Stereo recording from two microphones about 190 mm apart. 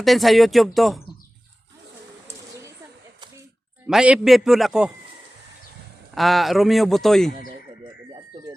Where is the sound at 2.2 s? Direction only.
15° right (ahead or behind).